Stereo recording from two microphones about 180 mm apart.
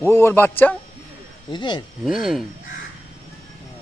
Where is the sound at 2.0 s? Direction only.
Centre (ahead or behind).